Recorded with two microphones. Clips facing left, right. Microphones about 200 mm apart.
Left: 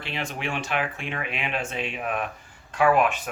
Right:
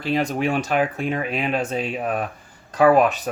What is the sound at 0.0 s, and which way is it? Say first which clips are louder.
Speech: right 10 dB; 40° right (ahead or behind).